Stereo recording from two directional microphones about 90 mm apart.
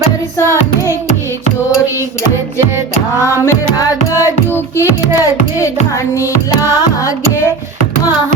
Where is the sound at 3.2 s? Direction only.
35° left (ahead or behind).